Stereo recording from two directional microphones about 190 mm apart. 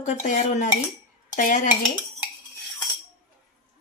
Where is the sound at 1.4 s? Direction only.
45° left (ahead or behind).